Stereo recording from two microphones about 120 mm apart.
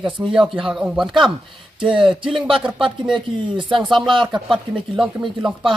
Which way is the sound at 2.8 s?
40° right (ahead or behind).